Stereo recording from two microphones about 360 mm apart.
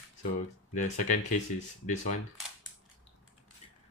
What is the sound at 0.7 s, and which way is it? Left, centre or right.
Speech, centre.